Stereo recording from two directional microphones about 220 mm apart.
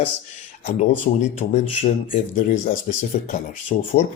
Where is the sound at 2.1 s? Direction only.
30° left (ahead or behind).